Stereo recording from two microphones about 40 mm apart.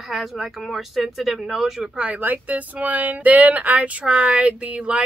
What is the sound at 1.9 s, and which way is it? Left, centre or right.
Speech, right.